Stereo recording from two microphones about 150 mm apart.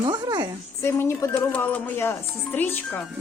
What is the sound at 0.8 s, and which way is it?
Speech, 15° left (ahead or behind).